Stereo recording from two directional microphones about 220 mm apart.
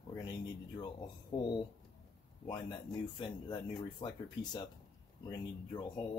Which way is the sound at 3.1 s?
20° left (ahead or behind).